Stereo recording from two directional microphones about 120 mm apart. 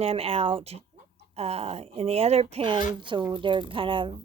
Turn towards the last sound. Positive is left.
turn(degrees=-45)  # may be behind; listen again after turning